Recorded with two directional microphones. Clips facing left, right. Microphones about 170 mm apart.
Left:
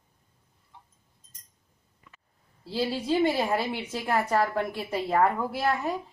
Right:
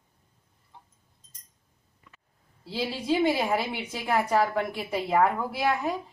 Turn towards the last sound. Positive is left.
turn(degrees=0)  # may be behind; listen again after turning